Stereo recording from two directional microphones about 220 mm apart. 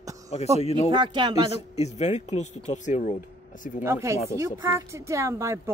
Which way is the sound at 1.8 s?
30° left (ahead or behind).